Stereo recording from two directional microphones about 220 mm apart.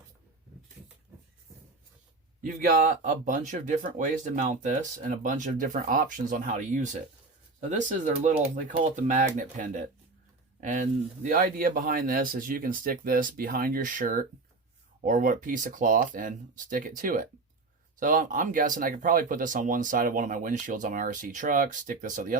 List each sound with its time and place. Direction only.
2.4 s speech: 35° right (ahead or behind)